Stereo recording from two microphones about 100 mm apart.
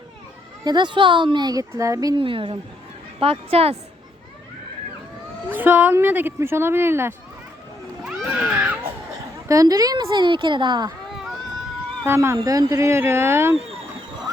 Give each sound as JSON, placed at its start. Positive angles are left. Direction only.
{"t": 0.6, "sound": "a woman's voice", "side_deg": -45}
{"t": 1.7, "sound": "speech", "side_deg": -30}
{"t": 2.1, "sound": "a woman's voice", "side_deg": -60}
{"t": 3.2, "sound": "speech", "side_deg": -70}
{"t": 5.5, "sound": "speech", "side_deg": -20}
{"t": 8.0, "sound": "baby cry", "side_deg": -10}
{"t": 9.5, "sound": "a woman's voice", "side_deg": -35}
{"t": 11.1, "sound": "run", "side_deg": -5}
{"t": 12.0, "sound": "speech", "side_deg": -25}